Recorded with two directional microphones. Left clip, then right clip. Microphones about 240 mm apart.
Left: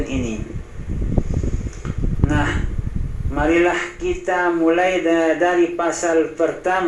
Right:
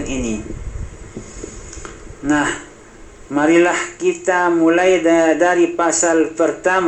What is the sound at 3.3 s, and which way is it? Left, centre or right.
A man's voice, right.